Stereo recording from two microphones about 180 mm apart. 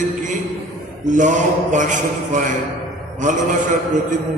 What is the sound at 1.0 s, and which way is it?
Mantra, 45° right (ahead or behind).